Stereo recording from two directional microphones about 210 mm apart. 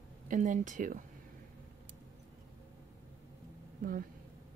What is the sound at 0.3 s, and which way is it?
Speech, 40° right (ahead or behind).